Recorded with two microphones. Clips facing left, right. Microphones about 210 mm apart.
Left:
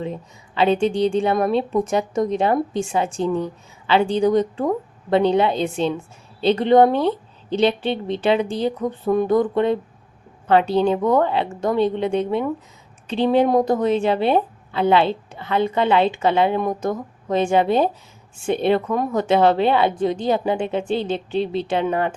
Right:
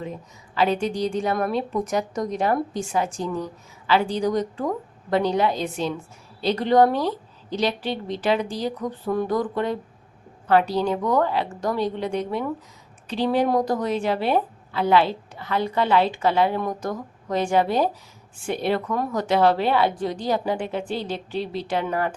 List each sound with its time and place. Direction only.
0.0 s a woman's voice: 25° left (ahead or behind)